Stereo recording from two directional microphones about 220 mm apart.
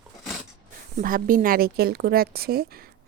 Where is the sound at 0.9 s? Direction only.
40° right (ahead or behind).